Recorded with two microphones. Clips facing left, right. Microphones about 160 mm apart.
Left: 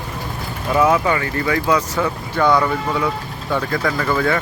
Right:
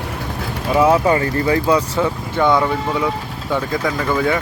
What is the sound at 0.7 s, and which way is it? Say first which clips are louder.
Speech: right 2 dB; 30° right (ahead or behind).